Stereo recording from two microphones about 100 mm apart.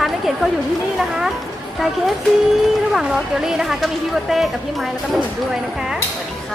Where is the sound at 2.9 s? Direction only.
5° right (ahead or behind).